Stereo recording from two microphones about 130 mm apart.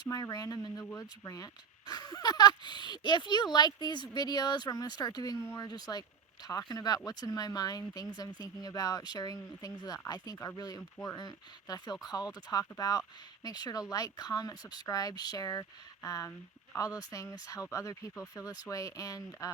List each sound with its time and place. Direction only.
0.1 s speech: 25° left (ahead or behind)